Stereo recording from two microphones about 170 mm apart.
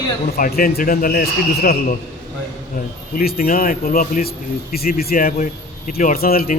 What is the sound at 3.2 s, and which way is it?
A man's voice, 60° left (ahead or behind).